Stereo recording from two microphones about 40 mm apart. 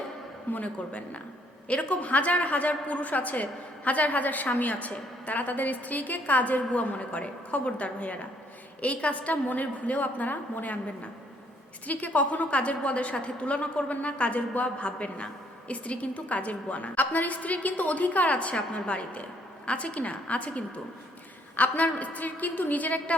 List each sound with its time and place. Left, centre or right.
0.5 s a woman's voice: left
11.9 s a woman's voice: left